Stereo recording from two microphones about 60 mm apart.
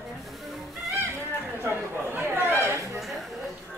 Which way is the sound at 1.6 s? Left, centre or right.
Right.